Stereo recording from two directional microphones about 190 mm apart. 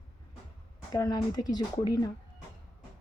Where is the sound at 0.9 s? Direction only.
20° left (ahead or behind).